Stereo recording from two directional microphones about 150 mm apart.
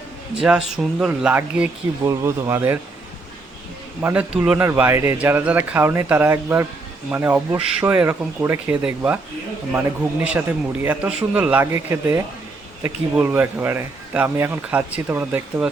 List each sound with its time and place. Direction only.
0.4 s speech: 5° right (ahead or behind)
4.0 s speech: 10° right (ahead or behind)